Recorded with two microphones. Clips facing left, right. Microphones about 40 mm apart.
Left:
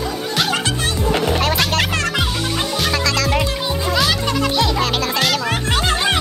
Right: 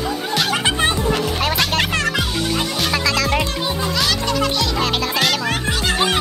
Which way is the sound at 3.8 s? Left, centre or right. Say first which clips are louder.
Left 3 dB; centre.